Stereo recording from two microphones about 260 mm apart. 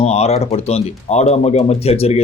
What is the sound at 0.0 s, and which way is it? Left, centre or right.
Speech, left.